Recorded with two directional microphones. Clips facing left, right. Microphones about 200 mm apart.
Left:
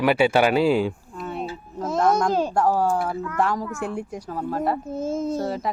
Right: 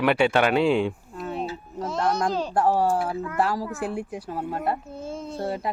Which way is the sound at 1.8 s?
50° left (ahead or behind).